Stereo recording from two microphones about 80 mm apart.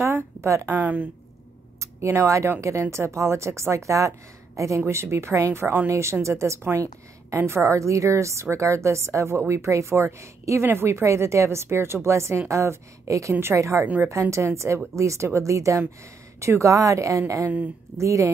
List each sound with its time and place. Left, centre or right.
0.0 s a sound: right
0.7 s a woman's voice: right
1.8 s a woman's voice: right